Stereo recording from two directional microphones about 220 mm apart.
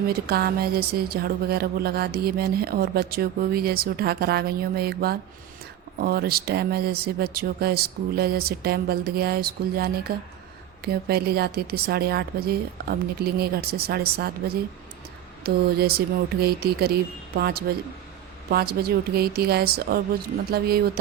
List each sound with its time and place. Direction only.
0.1 s speech: 45° right (ahead or behind)
15.4 s speech: 45° right (ahead or behind)